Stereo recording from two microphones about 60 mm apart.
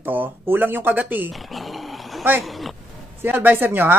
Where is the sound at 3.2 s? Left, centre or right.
Right.